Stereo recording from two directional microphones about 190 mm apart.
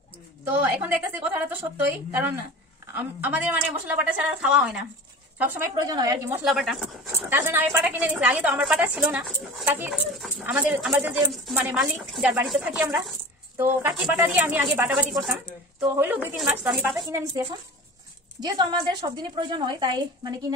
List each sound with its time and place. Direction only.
0.5 s a woman's voice: 10° right (ahead or behind)
5.4 s a woman's voice: 15° right (ahead or behind)
6.4 s speech: centre (ahead or behind)
7.1 s a woman's voice: 10° right (ahead or behind)